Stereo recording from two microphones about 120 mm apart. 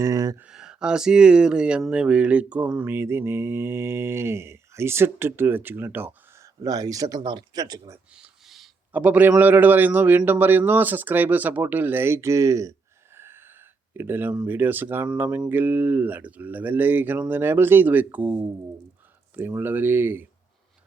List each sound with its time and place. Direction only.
0.0 s speech: 30° right (ahead or behind)
0.3 s a man's voice: 5° right (ahead or behind)
1.9 s mantra: 10° right (ahead or behind)
6.6 s speech: 30° right (ahead or behind)
8.1 s a sound: 5° right (ahead or behind)
8.9 s a man's voice: 15° right (ahead or behind)
13.1 s a sound: 20° right (ahead or behind)
13.9 s a man's voice: 20° right (ahead or behind)